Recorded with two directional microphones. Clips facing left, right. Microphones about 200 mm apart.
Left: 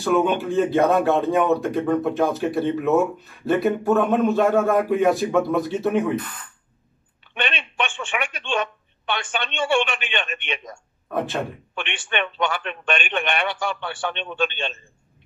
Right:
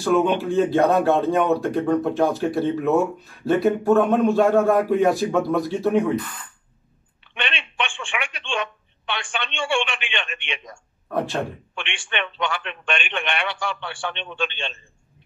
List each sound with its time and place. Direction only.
0.0 s speech: centre (ahead or behind)
7.3 s speech: 45° left (ahead or behind)
11.1 s speech: centre (ahead or behind)
11.7 s a man's voice: 45° left (ahead or behind)